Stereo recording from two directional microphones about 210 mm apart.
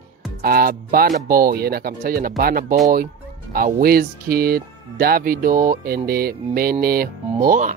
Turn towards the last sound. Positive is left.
turn(degrees=-40)  # may be behind; listen again after turning